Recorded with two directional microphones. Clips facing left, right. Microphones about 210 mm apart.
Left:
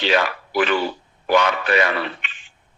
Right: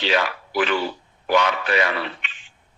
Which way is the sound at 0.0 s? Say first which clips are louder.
Left 2 dB; 55° left (ahead or behind).